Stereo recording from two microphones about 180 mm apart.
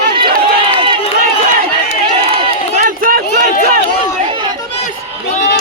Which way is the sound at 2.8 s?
50° right (ahead or behind).